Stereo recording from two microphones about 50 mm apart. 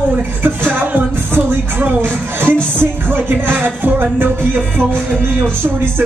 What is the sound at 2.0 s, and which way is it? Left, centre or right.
Music, right.